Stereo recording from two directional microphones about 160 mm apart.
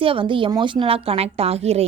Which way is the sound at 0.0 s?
35° right (ahead or behind).